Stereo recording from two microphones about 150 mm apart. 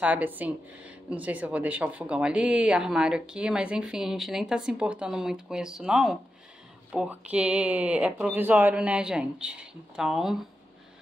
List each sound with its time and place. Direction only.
0.0 s speech: 10° right (ahead or behind)